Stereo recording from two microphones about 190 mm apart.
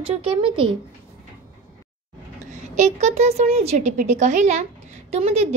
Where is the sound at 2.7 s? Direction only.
35° right (ahead or behind).